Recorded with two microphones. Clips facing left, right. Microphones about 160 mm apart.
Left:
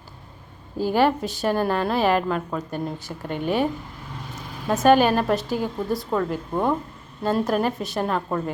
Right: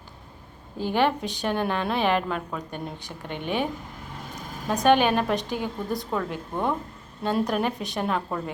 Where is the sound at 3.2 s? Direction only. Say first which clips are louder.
Left 5 dB; 45° left (ahead or behind).